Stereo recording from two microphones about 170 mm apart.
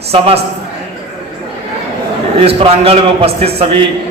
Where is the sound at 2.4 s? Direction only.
35° right (ahead or behind).